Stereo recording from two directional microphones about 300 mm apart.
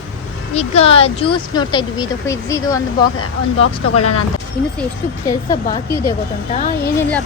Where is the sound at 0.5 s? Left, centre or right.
Left.